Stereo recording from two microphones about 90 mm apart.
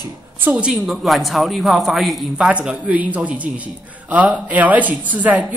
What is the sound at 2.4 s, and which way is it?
A man's voice, 15° right (ahead or behind).